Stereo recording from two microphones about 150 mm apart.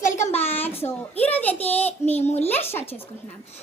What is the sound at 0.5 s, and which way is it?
A child's voice, 15° left (ahead or behind).